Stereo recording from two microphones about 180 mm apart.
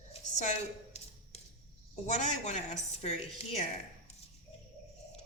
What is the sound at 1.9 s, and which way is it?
A woman's voice, 40° left (ahead or behind).